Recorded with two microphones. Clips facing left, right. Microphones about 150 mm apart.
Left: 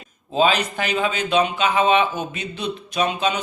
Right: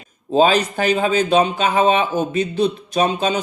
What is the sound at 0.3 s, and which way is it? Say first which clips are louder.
Speech: right 4 dB; 40° right (ahead or behind).